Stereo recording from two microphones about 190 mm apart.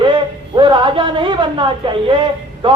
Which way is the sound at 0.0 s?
25° right (ahead or behind).